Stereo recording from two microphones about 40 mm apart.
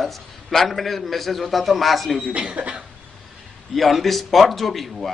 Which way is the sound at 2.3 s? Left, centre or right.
Right.